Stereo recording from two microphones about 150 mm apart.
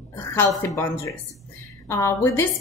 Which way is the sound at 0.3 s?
15° left (ahead or behind).